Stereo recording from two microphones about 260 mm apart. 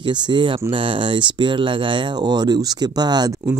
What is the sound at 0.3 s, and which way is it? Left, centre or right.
Speech, centre.